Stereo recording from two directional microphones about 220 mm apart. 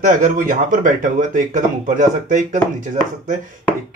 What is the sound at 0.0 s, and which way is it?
Speech, 35° right (ahead or behind).